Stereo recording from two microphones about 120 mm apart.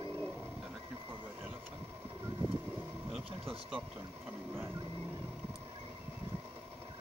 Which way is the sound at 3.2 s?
50° right (ahead or behind).